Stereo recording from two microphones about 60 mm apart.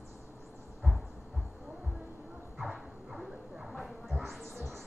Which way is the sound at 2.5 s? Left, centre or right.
Centre.